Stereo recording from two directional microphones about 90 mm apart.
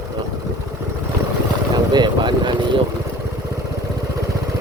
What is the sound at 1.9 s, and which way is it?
Speech, 55° right (ahead or behind).